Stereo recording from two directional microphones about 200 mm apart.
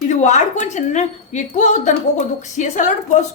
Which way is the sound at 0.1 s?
35° left (ahead or behind).